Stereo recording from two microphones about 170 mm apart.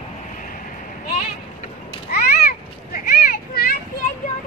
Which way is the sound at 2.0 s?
65° left (ahead or behind).